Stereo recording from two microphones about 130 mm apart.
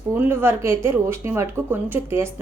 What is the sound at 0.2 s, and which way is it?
A woman's voice, 20° right (ahead or behind).